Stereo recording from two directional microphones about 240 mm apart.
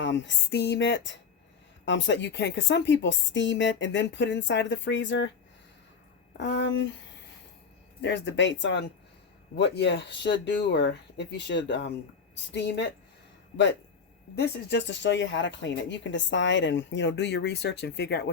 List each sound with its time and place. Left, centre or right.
0.0 s speech: left
6.3 s speech: left
8.0 s speech: left
14.3 s speech: left